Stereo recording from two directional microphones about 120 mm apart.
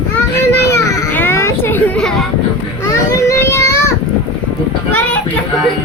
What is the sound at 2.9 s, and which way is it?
Child singing, 25° left (ahead or behind).